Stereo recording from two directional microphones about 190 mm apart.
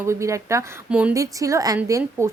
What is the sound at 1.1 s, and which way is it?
A woman's voice, 15° right (ahead or behind).